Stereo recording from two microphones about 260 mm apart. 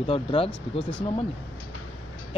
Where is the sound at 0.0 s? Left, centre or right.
Left.